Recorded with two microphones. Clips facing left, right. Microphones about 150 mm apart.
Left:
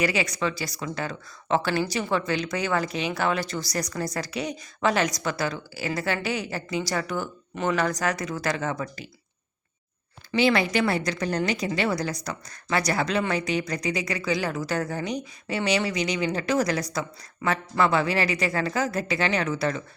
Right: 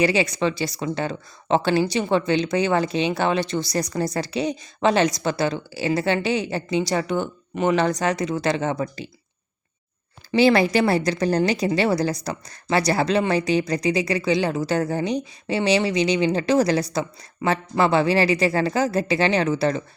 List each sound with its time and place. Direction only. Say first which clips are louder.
0.0 s speech: right 5 dB; 30° right (ahead or behind)
10.3 s a woman's voice: right 5 dB; 35° right (ahead or behind)